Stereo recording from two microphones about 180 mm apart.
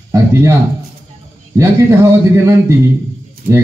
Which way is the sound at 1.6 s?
15° right (ahead or behind).